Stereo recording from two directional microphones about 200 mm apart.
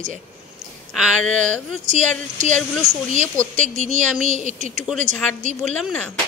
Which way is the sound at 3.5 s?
35° right (ahead or behind).